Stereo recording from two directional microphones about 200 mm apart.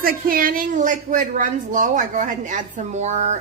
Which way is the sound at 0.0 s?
45° right (ahead or behind).